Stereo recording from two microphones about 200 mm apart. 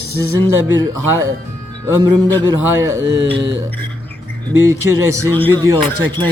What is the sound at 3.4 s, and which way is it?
Music, 60° right (ahead or behind).